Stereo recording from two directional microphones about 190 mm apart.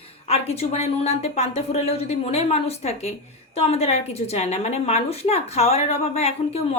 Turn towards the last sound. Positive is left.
turn(degrees=35)  # may be behind; listen again after turning